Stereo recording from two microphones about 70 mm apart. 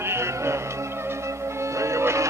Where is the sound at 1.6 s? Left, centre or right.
Right.